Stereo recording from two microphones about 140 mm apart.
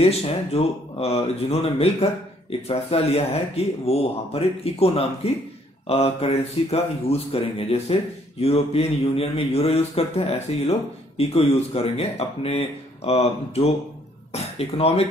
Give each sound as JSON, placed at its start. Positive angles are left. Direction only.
{"t": 0.0, "sound": "speech", "side_deg": 45}